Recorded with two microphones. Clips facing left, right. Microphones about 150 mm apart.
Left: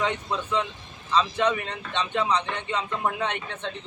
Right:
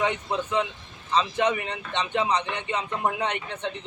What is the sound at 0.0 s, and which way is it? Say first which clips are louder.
A man's voice: right 1 dB; 20° right (ahead or behind).